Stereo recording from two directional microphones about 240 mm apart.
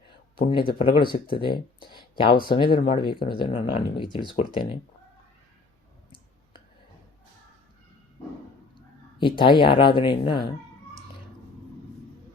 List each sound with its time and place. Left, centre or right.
0.4 s speech: left
9.4 s speech: left